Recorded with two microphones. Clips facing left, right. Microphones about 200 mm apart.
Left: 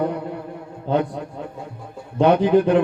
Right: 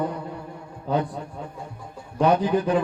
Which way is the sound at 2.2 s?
60° left (ahead or behind).